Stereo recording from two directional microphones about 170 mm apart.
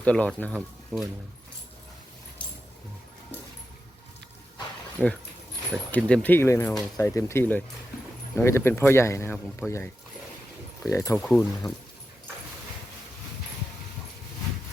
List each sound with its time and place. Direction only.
0.0 s speech: 5° left (ahead or behind)
5.9 s speech: 5° left (ahead or behind)
11.2 s speech: 5° left (ahead or behind)